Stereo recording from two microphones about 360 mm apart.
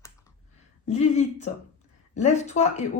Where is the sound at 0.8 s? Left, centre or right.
Centre.